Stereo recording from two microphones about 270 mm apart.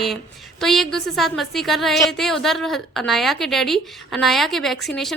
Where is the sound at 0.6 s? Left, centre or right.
Centre.